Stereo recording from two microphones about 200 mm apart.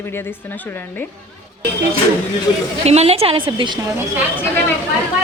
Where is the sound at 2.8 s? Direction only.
30° right (ahead or behind).